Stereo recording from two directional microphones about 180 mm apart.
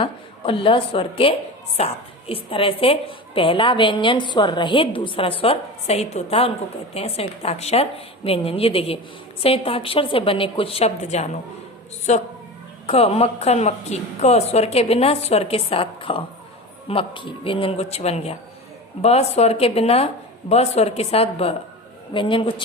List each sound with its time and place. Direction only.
0.0 s a woman's voice: 30° left (ahead or behind)